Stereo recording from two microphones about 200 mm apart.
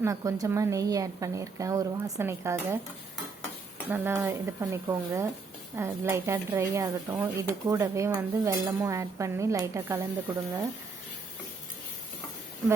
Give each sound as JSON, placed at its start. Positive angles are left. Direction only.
{"t": 0.0, "sound": "speech", "side_deg": -15}
{"t": 3.8, "sound": "speech", "side_deg": -10}